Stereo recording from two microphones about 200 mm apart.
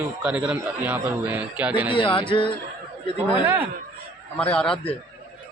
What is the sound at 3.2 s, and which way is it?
Speech, 10° right (ahead or behind).